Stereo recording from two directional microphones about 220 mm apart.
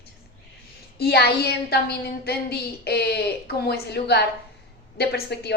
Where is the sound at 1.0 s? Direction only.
45° left (ahead or behind).